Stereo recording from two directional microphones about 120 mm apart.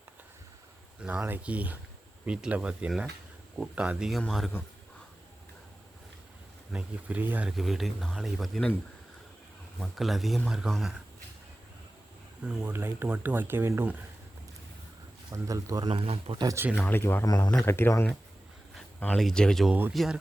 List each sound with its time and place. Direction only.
1.0 s speech: 10° right (ahead or behind)
6.7 s speech: 10° right (ahead or behind)
7.5 s speech: centre (ahead or behind)
9.8 s speech: centre (ahead or behind)
12.5 s speech: 10° right (ahead or behind)
12.7 s speech: 20° right (ahead or behind)
15.3 s a man's voice: 25° right (ahead or behind)
15.9 s speech: 50° right (ahead or behind)
16.7 s speech: 15° left (ahead or behind)
17.2 s speech: 35° left (ahead or behind)
17.7 s speech: 20° left (ahead or behind)
19.1 s speech: 5° left (ahead or behind)